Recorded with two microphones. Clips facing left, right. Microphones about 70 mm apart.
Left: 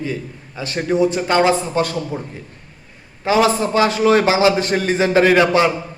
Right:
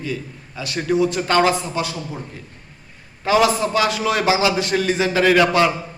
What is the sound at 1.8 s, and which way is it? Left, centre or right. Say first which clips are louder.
Speech: left 5 dB; left.